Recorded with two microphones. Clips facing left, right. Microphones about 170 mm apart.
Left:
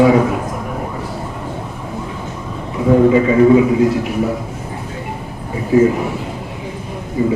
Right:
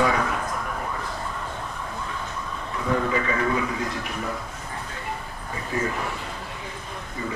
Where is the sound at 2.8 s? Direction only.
20° left (ahead or behind).